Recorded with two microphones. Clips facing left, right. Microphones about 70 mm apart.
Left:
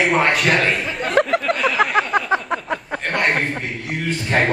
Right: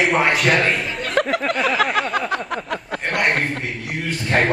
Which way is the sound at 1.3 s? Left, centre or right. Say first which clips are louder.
Left 1 dB; centre.